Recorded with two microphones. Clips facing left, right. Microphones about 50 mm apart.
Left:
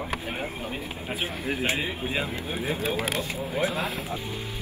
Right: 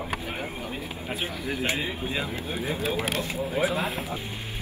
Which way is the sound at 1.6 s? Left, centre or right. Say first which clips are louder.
Even; centre.